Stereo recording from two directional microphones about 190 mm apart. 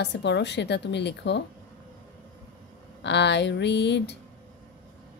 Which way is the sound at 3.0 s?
65° left (ahead or behind).